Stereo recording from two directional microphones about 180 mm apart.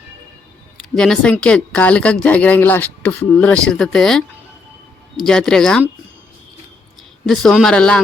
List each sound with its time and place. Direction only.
0.9 s speech: 5° left (ahead or behind)
5.2 s speech: 5° left (ahead or behind)
7.3 s speech: centre (ahead or behind)